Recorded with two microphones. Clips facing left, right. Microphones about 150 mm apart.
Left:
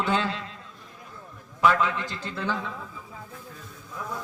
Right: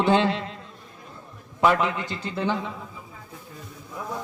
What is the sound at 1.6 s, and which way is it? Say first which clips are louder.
A man's voice: right 1 dB; 25° right (ahead or behind).